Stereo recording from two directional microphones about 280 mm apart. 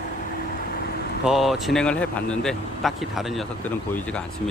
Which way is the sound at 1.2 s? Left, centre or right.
Centre.